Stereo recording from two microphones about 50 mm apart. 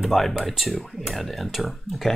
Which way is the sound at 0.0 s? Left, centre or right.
Centre.